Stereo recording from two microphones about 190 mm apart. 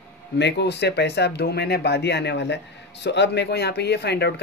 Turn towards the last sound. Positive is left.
turn(degrees=60)  # may be behind; listen again after turning